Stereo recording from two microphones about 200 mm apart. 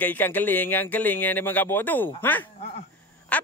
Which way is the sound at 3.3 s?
5° left (ahead or behind).